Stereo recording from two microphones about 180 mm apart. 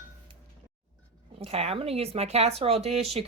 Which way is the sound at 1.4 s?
35° right (ahead or behind).